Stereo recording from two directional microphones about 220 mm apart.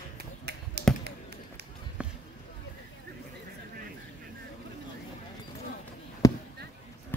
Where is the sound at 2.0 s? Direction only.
5° right (ahead or behind).